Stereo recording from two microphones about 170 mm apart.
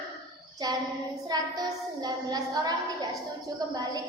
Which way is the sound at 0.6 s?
20° right (ahead or behind).